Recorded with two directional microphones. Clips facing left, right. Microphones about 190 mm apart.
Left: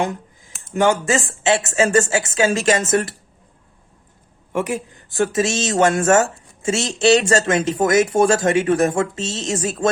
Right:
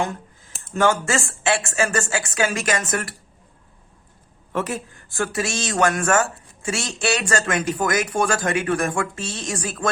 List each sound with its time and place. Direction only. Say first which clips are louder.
0.0 s speech: left 3 dB; 15° left (ahead or behind)
4.5 s speech: left 3 dB; 15° left (ahead or behind)